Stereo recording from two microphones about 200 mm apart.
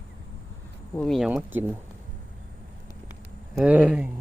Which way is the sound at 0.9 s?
5° left (ahead or behind).